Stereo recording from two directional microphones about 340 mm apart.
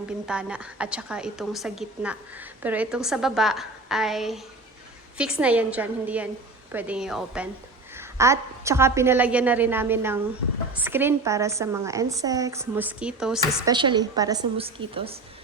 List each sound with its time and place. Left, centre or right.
0.3 s a woman's voice: centre
13.7 s a woman's voice: centre